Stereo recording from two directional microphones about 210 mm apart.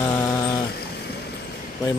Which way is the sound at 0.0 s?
10° left (ahead or behind).